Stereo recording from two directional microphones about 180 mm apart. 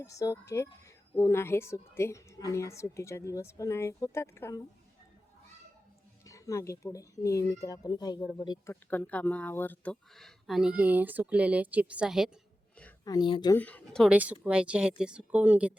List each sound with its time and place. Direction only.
0.0 s a woman's voice: 20° left (ahead or behind)
6.2 s a woman's voice: 15° left (ahead or behind)
8.7 s speech: 10° left (ahead or behind)
13.1 s speech: 25° left (ahead or behind)
13.6 s a woman's voice: 10° left (ahead or behind)
14.1 s speech: 5° right (ahead or behind)